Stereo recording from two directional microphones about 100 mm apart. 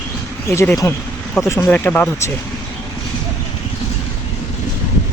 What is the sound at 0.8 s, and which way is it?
Speech, 30° left (ahead or behind).